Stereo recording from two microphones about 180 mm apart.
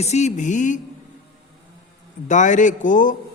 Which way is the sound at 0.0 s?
40° left (ahead or behind).